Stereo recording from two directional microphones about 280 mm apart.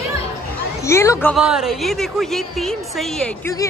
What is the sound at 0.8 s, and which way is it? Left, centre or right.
A woman's voice, centre.